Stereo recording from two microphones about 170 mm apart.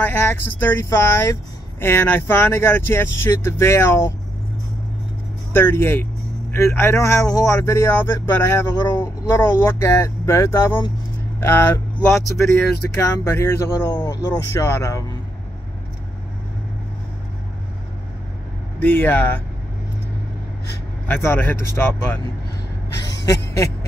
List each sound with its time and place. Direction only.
0.0 s speech: 10° left (ahead or behind)
5.5 s speech: 15° left (ahead or behind)
18.8 s speech: 10° left (ahead or behind)
21.1 s speech: 15° left (ahead or behind)